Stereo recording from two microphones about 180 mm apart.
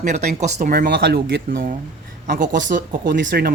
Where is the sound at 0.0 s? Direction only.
40° right (ahead or behind).